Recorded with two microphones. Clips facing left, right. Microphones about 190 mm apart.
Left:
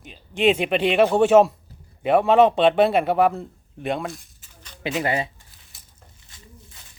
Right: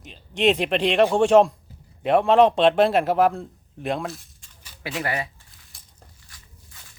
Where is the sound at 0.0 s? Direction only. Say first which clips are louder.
Left 1 dB; centre (ahead or behind).